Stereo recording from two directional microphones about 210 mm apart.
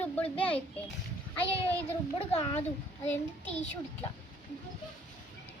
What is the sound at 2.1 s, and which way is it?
Speech, 25° left (ahead or behind).